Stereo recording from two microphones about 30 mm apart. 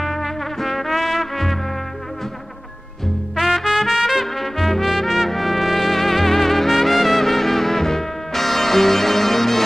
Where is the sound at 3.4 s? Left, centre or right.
Centre.